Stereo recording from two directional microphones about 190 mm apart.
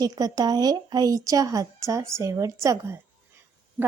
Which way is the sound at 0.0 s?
20° right (ahead or behind).